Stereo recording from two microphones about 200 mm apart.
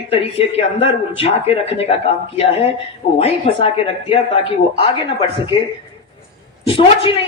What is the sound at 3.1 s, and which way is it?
A woman's voice, 30° left (ahead or behind).